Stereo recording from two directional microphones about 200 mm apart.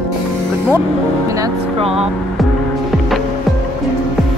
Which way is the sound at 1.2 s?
15° right (ahead or behind).